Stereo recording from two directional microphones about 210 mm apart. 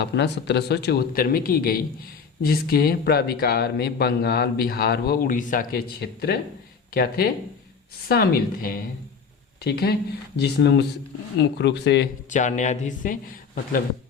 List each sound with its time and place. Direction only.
0.0 s speech: 55° left (ahead or behind)
12.3 s speech: 35° left (ahead or behind)